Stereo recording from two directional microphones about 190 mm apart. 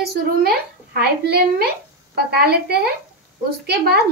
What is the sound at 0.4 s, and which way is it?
A woman's voice, 55° right (ahead or behind).